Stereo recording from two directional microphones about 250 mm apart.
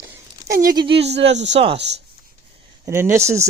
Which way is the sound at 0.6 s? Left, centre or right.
Centre.